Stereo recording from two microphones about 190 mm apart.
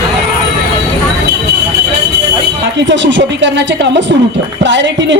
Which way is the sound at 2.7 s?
70° right (ahead or behind).